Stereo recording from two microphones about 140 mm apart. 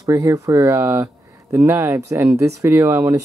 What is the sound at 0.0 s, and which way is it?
Speech, 25° right (ahead or behind).